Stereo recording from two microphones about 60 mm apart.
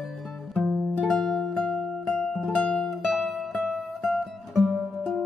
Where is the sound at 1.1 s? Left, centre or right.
Centre.